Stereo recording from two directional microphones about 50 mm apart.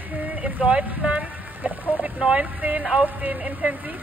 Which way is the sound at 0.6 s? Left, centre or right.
Right.